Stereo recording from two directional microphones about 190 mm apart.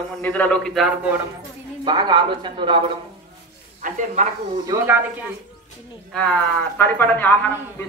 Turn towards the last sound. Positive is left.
turn(degrees=10)  # may be behind; listen again after turning